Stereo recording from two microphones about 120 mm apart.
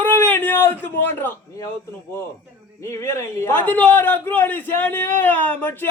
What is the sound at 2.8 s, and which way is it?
A man's voice, 25° left (ahead or behind).